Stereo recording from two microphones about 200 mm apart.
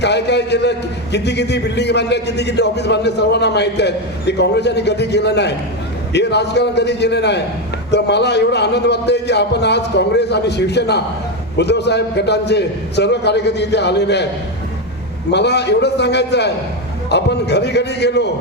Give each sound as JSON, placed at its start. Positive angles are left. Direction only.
{"t": 0.0, "sound": "a man's voice", "side_deg": 60}
{"t": 15.3, "sound": "a man's voice", "side_deg": 60}